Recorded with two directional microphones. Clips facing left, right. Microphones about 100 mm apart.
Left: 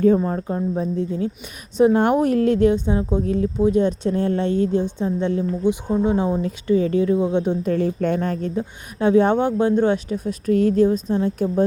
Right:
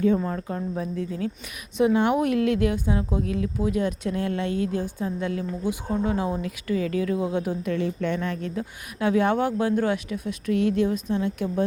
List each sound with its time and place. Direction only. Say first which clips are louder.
0.3 s a woman's voice: left 6 dB; 30° left (ahead or behind)
1.8 s a woman's voice: left 5 dB; 45° left (ahead or behind)
2.1 s a woman's voice: left 5 dB; 35° left (ahead or behind)